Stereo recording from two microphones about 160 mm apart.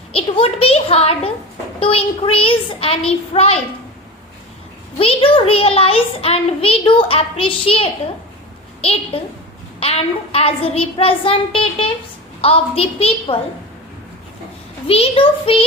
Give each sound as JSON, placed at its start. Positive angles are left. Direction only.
{"t": 0.1, "sound": "a child's voice", "side_deg": 35}
{"t": 4.9, "sound": "a child's voice", "side_deg": 35}
{"t": 14.8, "sound": "a child's voice", "side_deg": 35}